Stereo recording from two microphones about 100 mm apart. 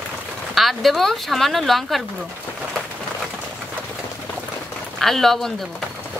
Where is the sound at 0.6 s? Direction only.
Centre (ahead or behind).